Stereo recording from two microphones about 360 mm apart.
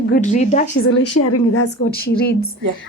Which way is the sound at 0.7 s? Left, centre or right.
Left.